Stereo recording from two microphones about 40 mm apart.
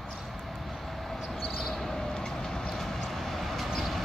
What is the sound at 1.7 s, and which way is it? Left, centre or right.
Vehicle, centre.